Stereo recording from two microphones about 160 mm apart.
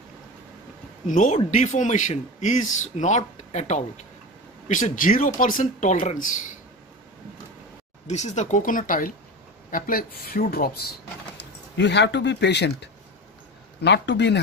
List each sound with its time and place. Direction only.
1.0 s speech: 50° left (ahead or behind)
8.1 s speech: 45° left (ahead or behind); by 10.9 s 70° left (ahead or behind)
11.3 s speech: 90° left